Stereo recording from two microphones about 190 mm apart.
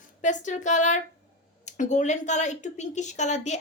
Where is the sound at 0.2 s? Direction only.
40° left (ahead or behind).